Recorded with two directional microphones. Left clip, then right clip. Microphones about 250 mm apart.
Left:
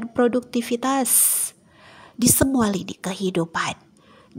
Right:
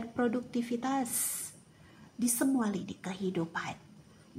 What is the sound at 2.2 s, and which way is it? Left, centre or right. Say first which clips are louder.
A woman's voice: left 11 dB; left.